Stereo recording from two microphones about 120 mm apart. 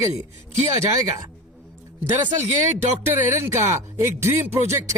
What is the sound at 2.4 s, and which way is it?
Speech, 20° right (ahead or behind).